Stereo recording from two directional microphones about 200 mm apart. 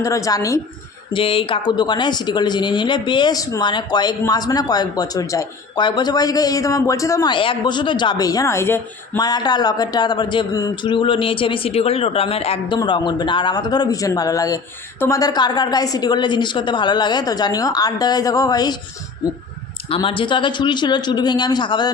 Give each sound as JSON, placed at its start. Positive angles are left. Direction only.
{"t": 0.0, "sound": "a woman's voice", "side_deg": 15}
{"t": 1.1, "sound": "speech", "side_deg": 25}
{"t": 19.9, "sound": "speech", "side_deg": 25}